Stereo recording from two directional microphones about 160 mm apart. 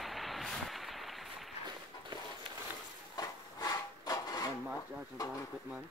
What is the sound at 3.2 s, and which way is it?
Wood, 25° left (ahead or behind).